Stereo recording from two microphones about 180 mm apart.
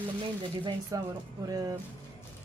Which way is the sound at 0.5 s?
25° right (ahead or behind).